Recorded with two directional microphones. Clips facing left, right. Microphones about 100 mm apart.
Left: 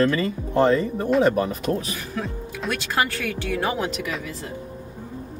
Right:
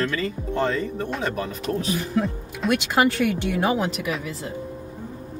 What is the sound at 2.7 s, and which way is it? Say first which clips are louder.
Speech: right 5 dB; 15° right (ahead or behind).